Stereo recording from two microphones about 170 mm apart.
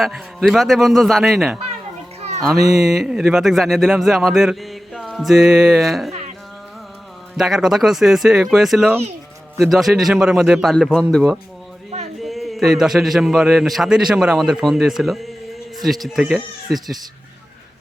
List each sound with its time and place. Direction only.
0.0 s speech: centre (ahead or behind)
2.8 s speech: centre (ahead or behind)
6.1 s a sound: 40° right (ahead or behind)
7.3 s speech: centre (ahead or behind)